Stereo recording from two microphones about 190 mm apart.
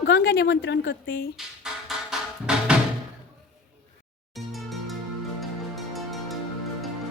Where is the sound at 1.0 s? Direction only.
50° left (ahead or behind).